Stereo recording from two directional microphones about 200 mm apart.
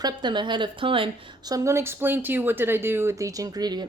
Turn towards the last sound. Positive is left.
turn(degrees=-20)  # may be behind; listen again after turning